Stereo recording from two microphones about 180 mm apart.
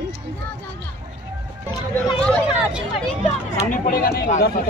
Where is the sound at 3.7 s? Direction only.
50° left (ahead or behind).